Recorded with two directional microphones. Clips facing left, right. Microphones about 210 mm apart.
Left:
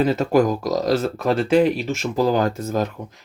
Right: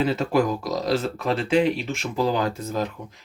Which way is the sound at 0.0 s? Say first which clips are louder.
Left 4 dB; 40° left (ahead or behind).